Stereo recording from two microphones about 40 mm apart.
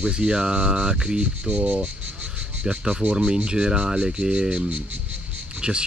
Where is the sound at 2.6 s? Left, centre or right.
Right.